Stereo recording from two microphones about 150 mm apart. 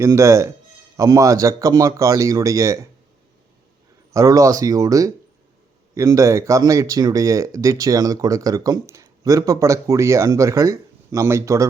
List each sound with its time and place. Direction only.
0.0 s speech: 20° right (ahead or behind)
4.1 s speech: 20° right (ahead or behind)